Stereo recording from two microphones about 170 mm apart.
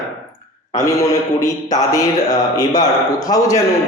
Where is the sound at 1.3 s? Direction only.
20° left (ahead or behind).